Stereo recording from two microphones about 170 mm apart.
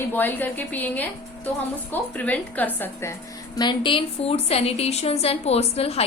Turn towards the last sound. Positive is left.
turn(degrees=35)  # may be behind; listen again after turning